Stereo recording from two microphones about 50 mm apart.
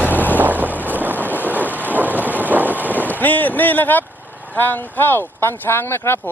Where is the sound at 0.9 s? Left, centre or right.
Right.